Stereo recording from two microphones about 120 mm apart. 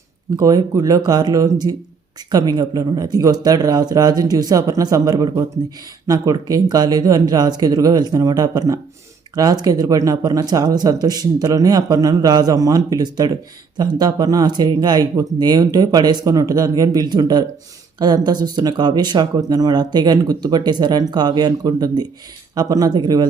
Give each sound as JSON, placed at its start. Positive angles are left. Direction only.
{"t": 0.3, "sound": "speech", "side_deg": -30}